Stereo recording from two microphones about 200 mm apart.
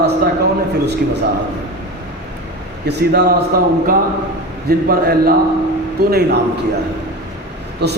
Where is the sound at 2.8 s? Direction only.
50° right (ahead or behind).